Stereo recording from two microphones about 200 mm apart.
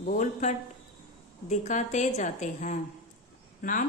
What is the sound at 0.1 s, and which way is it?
A woman's voice, 40° left (ahead or behind).